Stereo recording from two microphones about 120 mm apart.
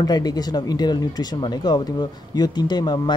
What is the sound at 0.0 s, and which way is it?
Speech, 35° left (ahead or behind).